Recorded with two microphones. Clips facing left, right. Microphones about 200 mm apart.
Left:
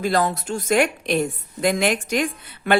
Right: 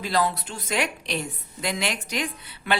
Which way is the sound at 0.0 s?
45° left (ahead or behind).